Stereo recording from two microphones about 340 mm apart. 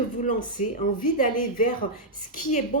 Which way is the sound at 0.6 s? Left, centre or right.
Left.